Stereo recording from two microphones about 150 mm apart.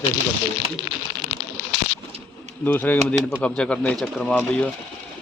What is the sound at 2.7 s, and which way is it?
Speech, 10° left (ahead or behind).